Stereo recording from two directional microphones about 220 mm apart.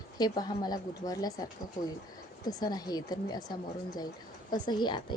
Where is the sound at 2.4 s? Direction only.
15° left (ahead or behind).